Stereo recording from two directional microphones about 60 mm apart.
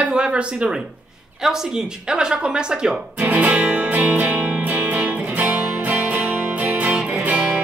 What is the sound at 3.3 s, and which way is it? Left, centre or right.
Music, right.